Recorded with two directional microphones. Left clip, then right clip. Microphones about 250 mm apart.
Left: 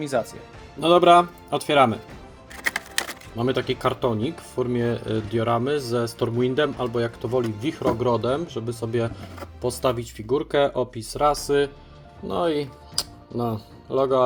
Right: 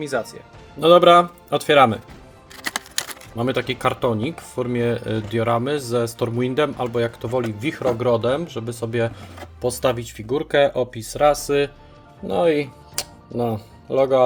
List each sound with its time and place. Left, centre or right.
0.0 s speech: centre
0.8 s speech: right
2.6 s computer keyboard: centre
3.3 s speech: right